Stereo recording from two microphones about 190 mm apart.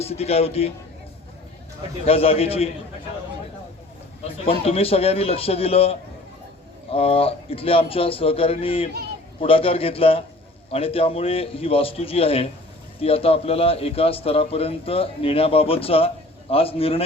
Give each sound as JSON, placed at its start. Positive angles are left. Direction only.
{"t": 0.0, "sound": "a man's voice", "side_deg": 35}
{"t": 2.0, "sound": "a man's voice", "side_deg": 30}
{"t": 4.2, "sound": "a man's voice", "side_deg": 30}